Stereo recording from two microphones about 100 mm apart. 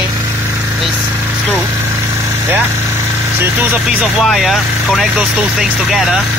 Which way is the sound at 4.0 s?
Centre (ahead or behind).